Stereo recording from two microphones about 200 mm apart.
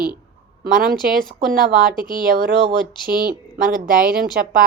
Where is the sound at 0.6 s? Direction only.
45° right (ahead or behind).